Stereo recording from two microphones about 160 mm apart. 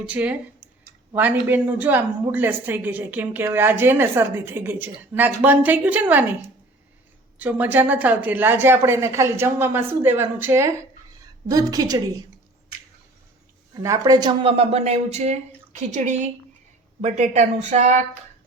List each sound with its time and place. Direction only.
0.0 s a woman's voice: 10° right (ahead or behind)
7.3 s a woman's voice: 10° right (ahead or behind)
13.8 s speech: 20° right (ahead or behind); by 18.0 s 50° right (ahead or behind)